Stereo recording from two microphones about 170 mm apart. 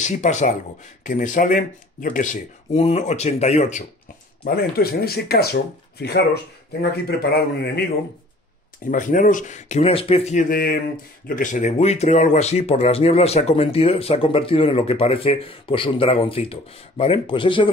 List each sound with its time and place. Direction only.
0.0 s speech: 45° left (ahead or behind)
4.6 s speech: 65° left (ahead or behind)
8.8 s speech: 50° left (ahead or behind)
10.5 s speech: 60° left (ahead or behind); by 17.6 s 30° left (ahead or behind)